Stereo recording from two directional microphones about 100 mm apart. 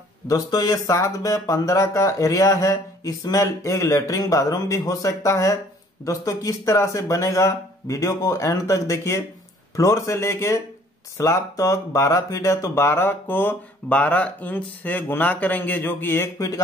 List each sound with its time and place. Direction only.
0.3 s speech: 40° left (ahead or behind); by 16.3 s 20° left (ahead or behind)
16.3 s speech: 35° left (ahead or behind)